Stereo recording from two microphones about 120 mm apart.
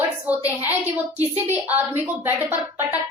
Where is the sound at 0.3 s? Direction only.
15° right (ahead or behind).